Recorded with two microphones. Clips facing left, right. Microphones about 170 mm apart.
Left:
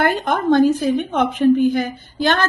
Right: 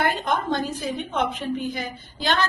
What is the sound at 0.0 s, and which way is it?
A woman's voice, 55° left (ahead or behind).